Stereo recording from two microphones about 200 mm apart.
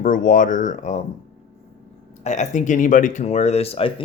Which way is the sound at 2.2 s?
35° left (ahead or behind).